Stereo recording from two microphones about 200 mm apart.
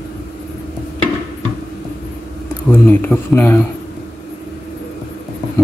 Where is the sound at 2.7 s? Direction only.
10° left (ahead or behind).